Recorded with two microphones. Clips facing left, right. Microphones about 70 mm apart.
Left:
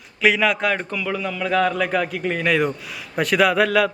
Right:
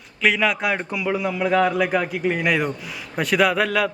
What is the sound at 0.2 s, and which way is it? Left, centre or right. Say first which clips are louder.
A man's voice: left 2 dB; centre.